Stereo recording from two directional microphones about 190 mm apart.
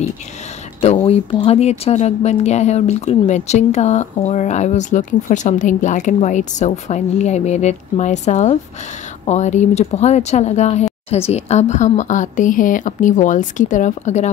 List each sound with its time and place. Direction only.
0.7 s speech: 30° left (ahead or behind)